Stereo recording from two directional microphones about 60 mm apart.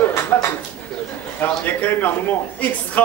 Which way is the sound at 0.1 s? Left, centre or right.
Left.